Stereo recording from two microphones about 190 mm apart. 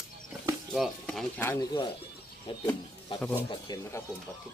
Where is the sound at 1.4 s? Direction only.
15° left (ahead or behind).